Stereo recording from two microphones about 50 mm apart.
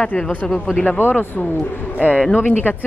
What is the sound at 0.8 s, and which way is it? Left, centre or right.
Speech, left.